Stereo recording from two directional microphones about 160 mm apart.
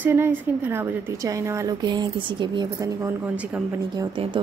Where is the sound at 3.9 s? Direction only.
25° right (ahead or behind).